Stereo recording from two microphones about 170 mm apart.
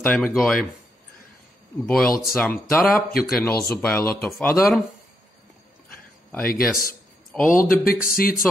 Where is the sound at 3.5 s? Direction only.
15° left (ahead or behind).